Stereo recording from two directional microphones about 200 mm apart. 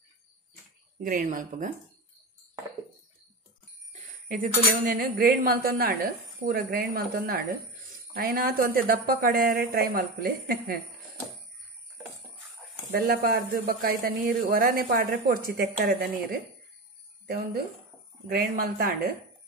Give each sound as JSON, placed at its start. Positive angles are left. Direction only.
{"t": 0.9, "sound": "speech", "side_deg": -45}
{"t": 3.9, "sound": "bicycle bell", "side_deg": -45}
{"t": 4.9, "sound": "speech", "side_deg": -50}
{"t": 12.9, "sound": "speech", "side_deg": -50}